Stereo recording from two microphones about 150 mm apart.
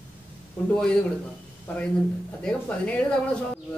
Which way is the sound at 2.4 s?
10° left (ahead or behind).